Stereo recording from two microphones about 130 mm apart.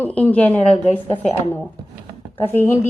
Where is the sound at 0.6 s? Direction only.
55° left (ahead or behind).